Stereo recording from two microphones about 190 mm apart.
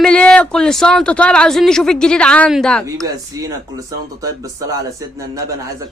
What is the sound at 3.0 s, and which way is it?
Speech, 20° right (ahead or behind).